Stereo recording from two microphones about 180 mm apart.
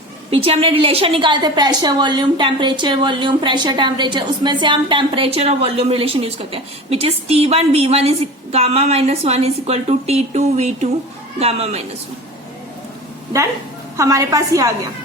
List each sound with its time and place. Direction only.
0.3 s a woman's voice: 30° right (ahead or behind)
13.9 s a woman's voice: 20° right (ahead or behind)